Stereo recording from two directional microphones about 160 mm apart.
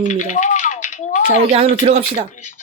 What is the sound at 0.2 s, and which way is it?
Typewriter, 50° left (ahead or behind).